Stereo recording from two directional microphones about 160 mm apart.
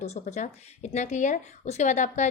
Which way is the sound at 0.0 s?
45° left (ahead or behind).